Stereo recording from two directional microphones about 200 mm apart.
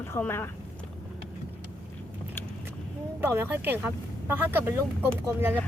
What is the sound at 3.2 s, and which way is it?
Speech, 10° right (ahead or behind).